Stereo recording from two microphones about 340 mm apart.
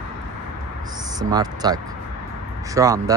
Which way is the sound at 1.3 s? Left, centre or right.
Centre.